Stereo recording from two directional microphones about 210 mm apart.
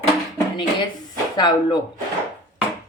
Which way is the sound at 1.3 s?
20° left (ahead or behind).